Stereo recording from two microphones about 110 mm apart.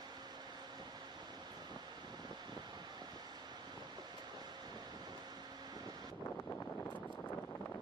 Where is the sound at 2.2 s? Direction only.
40° right (ahead or behind).